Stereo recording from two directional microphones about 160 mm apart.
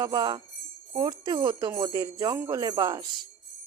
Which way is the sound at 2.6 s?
25° right (ahead or behind).